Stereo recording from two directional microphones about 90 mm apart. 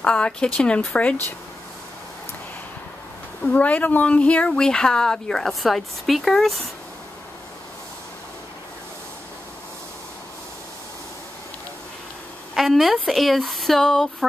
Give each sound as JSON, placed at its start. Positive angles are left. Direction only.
{"t": 0.0, "sound": "speech", "side_deg": 10}
{"t": 3.4, "sound": "speech", "side_deg": 15}
{"t": 12.5, "sound": "a woman's voice", "side_deg": 0}